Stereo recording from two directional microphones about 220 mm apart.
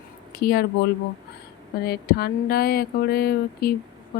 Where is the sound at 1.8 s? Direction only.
45° left (ahead or behind).